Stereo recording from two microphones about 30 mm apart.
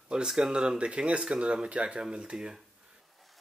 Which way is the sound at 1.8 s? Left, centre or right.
Right.